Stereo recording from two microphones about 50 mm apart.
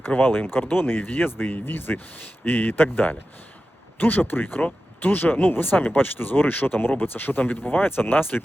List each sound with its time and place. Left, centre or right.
0.2 s speech: left